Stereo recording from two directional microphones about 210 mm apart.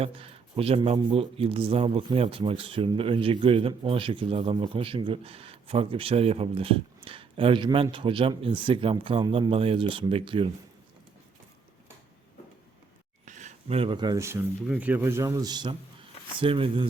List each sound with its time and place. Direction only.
0.0 s speech: 25° right (ahead or behind)
13.2 s speech: 35° right (ahead or behind)